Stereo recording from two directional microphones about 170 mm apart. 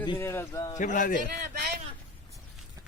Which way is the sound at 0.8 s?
50° left (ahead or behind).